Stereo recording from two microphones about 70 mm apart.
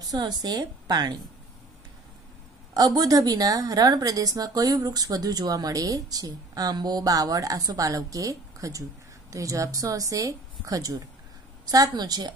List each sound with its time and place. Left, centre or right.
0.1 s a woman's voice: right
2.7 s a woman's voice: right